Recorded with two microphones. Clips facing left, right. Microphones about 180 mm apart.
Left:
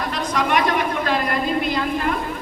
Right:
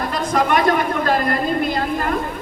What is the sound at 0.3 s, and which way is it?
A man's voice, 45° right (ahead or behind).